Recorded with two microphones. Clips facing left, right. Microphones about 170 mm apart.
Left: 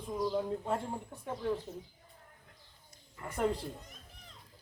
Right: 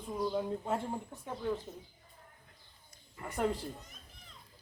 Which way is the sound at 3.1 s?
20° right (ahead or behind).